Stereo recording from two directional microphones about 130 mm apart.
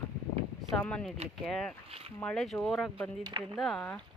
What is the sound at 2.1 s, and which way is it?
A woman's voice, 5° left (ahead or behind).